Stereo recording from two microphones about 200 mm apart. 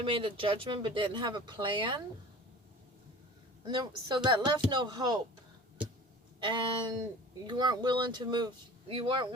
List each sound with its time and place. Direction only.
0.0 s speech: 25° right (ahead or behind)
3.6 s speech: 20° right (ahead or behind)
6.4 s speech: 25° right (ahead or behind)